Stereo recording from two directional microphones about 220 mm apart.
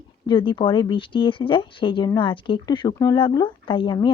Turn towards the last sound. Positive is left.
turn(degrees=20)  # may be behind; listen again after turning